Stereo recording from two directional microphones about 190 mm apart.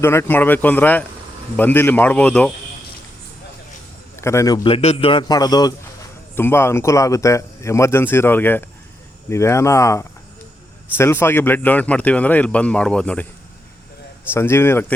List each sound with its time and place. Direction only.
0.0 s speech: 10° left (ahead or behind)
4.2 s a man's voice: 15° left (ahead or behind)
14.3 s speech: 15° left (ahead or behind)